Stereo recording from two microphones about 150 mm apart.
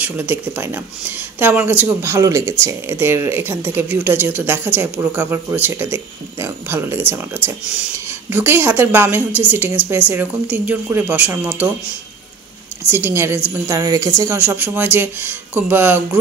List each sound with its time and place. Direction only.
0.0 s speech: 10° right (ahead or behind)
12.9 s a woman's voice: 15° right (ahead or behind)